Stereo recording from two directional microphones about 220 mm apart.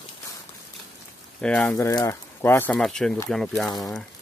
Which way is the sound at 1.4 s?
5° left (ahead or behind).